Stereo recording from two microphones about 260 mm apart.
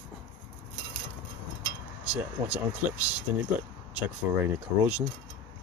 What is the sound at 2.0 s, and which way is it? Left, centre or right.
Speech, centre.